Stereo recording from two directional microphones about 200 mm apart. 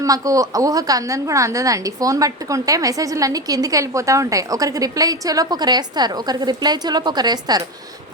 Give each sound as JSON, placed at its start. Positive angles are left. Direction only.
{"t": 0.0, "sound": "a woman's voice", "side_deg": -15}